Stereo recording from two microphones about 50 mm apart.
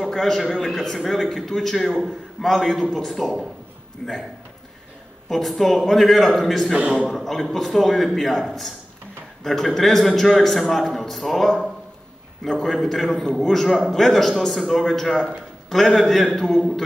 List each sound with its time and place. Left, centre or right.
0.0 s a man's voice: centre
5.3 s a man's voice: centre
6.7 s a man's voice: centre
7.1 s a man's voice: centre